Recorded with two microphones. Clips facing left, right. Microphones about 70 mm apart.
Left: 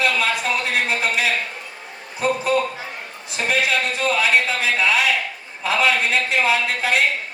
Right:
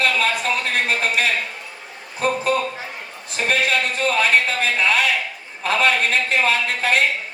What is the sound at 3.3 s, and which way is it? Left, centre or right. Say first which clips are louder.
A man's voice: right 1 dB; right.